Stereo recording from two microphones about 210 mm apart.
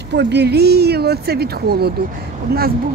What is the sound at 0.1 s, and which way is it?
Speech, 55° right (ahead or behind).